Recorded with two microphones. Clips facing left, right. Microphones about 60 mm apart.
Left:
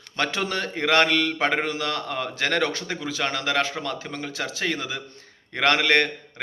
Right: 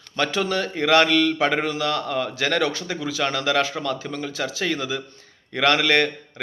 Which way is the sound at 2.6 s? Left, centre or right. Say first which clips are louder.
Right 2 dB; left.